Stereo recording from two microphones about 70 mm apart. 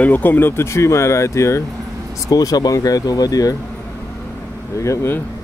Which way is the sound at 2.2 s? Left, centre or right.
Left.